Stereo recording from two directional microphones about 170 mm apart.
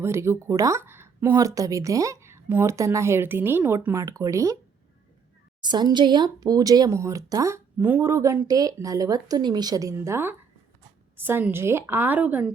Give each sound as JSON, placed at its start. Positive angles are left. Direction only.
{"t": 0.0, "sound": "a woman's voice", "side_deg": -15}
{"t": 5.6, "sound": "a woman's voice", "side_deg": -25}